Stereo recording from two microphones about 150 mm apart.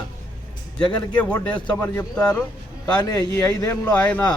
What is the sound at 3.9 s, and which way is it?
Speech, 10° left (ahead or behind).